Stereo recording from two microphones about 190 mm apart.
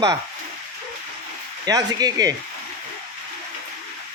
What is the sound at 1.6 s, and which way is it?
Speech, 20° right (ahead or behind).